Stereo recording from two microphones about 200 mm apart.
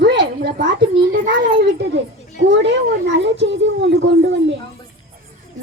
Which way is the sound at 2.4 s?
65° right (ahead or behind).